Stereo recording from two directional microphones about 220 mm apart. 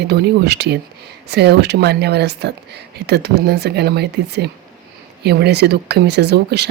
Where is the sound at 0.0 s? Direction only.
50° right (ahead or behind).